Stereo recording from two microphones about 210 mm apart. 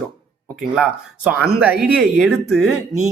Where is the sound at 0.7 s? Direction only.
5° right (ahead or behind).